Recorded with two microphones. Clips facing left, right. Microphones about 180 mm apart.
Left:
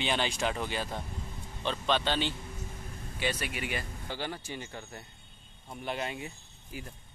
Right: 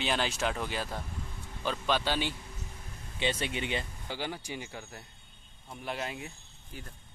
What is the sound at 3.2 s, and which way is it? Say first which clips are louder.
Speech: right 2 dB; 25° right (ahead or behind).